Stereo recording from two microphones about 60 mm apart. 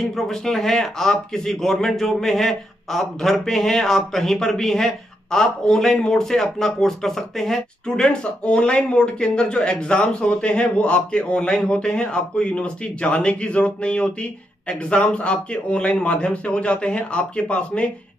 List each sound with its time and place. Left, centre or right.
0.0 s a man's voice: centre